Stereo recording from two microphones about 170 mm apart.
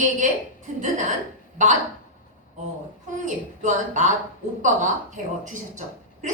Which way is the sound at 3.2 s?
45° right (ahead or behind).